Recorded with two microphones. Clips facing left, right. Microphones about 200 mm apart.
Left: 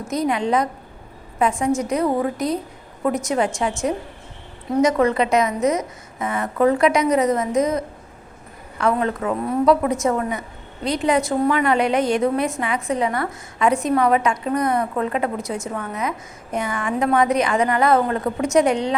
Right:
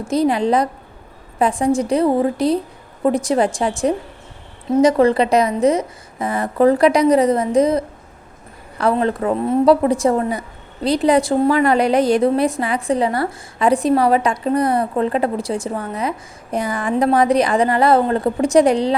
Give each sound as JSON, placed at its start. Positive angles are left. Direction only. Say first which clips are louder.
{"t": 0.0, "sound": "a woman's voice", "louder": "right 5 dB", "side_deg": -30}